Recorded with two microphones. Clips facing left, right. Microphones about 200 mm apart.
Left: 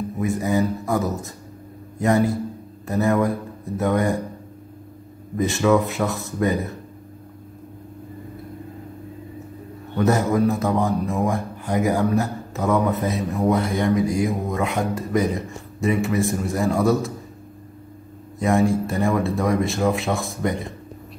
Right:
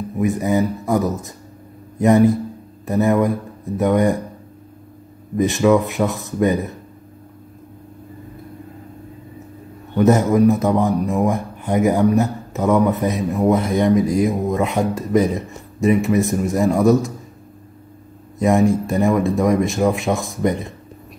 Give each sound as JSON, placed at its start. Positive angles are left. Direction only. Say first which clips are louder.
{"t": 0.2, "sound": "a man's voice", "louder": "right 4 dB", "side_deg": -20}
{"t": 5.4, "sound": "speech", "louder": "right 3 dB", "side_deg": -15}
{"t": 9.9, "sound": "a man's voice", "louder": "right 5 dB", "side_deg": -20}
{"t": 18.4, "sound": "speech", "louder": "right 3 dB", "side_deg": -20}